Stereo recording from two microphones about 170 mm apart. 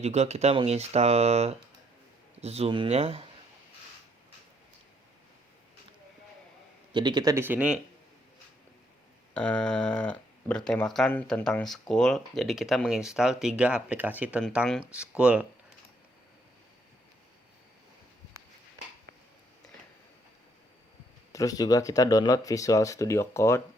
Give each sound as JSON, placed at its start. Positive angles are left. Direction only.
{"t": 0.0, "sound": "speech", "side_deg": -40}
{"t": 6.9, "sound": "speech", "side_deg": -25}
{"t": 9.3, "sound": "speech", "side_deg": 5}
{"t": 21.3, "sound": "speech", "side_deg": 20}